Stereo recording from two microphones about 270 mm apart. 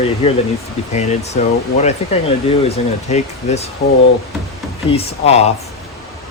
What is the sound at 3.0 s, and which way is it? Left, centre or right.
Speech, left.